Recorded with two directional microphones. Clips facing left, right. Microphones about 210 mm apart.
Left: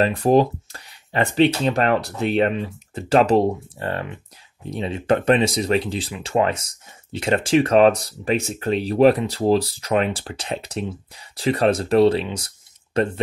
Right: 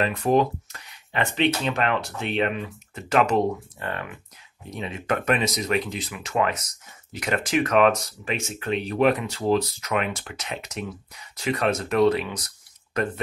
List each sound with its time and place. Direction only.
0.0 s speech: 30° left (ahead or behind)